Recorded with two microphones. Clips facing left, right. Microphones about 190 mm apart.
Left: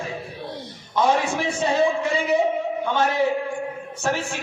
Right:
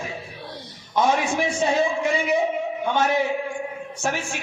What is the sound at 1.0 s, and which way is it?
A man's voice, 15° right (ahead or behind).